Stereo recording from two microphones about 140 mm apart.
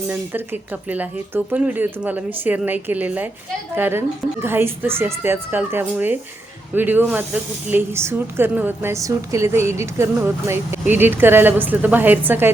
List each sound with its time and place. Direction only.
0.1 s a woman's voice: 15° right (ahead or behind)